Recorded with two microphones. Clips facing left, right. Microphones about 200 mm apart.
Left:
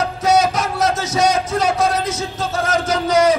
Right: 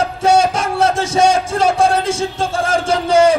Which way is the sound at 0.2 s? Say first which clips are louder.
Right 2 dB; 30° right (ahead or behind).